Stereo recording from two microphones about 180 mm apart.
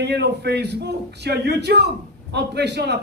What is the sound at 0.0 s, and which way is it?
A man's voice, 70° right (ahead or behind).